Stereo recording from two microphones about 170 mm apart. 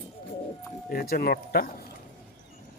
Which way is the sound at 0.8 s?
60° left (ahead or behind).